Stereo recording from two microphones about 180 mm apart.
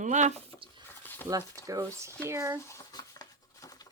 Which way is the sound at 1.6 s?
20° right (ahead or behind).